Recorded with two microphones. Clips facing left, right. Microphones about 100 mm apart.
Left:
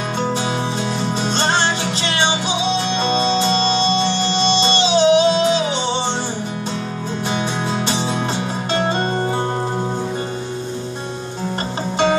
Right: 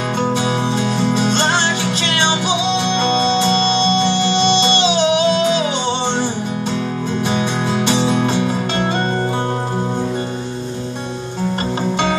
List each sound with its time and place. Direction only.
4.4 s music: 35° left (ahead or behind)
7.7 s music: 35° left (ahead or behind)